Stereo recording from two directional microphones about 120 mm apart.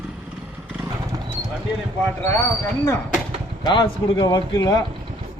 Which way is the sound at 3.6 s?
40° left (ahead or behind).